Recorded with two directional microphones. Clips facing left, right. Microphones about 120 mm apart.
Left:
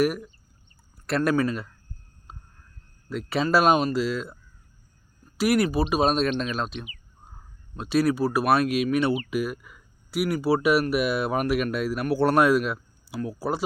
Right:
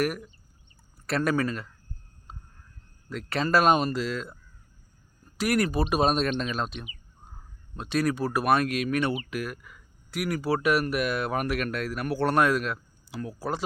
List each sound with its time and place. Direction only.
0.0 s speech: 5° left (ahead or behind)
3.1 s speech: 5° left (ahead or behind)